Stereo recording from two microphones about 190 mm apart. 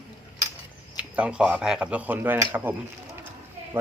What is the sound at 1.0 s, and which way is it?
Speech, 5° right (ahead or behind).